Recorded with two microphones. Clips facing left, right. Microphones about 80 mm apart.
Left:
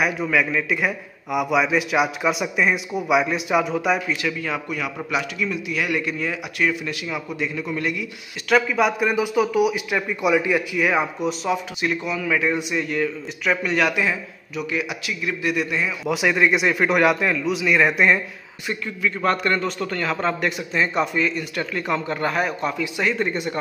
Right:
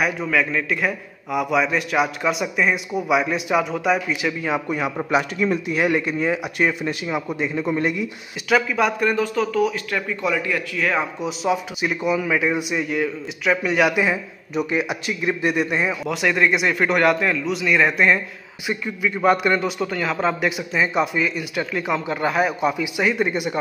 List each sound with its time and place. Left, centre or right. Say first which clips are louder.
0.0 s a man's voice: even; centre
4.1 s a man's voice: right 2 dB; centre
8.5 s speech: even; centre
11.2 s a man's voice: right 1 dB; centre
14.6 s a man's voice: right 4 dB; right
16.1 s a man's voice: left 2 dB; centre
18.7 s a man's voice: right 1 dB; centre